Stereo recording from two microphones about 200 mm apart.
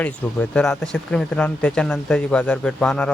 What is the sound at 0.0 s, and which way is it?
Speech, 5° left (ahead or behind).